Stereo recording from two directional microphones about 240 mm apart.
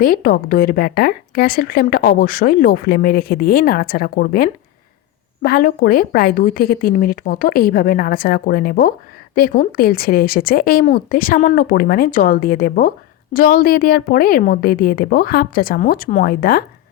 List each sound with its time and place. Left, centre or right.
0.0 s a woman's voice: left